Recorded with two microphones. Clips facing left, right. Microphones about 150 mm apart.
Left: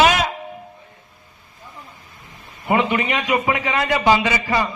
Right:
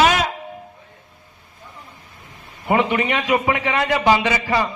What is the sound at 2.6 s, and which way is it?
A man's voice, 5° left (ahead or behind).